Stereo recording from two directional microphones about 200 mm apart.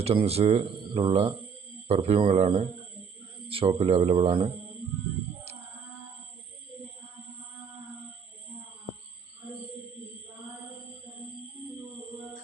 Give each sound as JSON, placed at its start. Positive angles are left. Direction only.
{"t": 0.0, "sound": "speech", "side_deg": -30}